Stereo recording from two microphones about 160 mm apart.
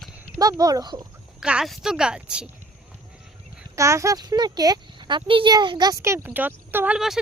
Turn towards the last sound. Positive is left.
turn(degrees=-5)  # may be behind; listen again after turning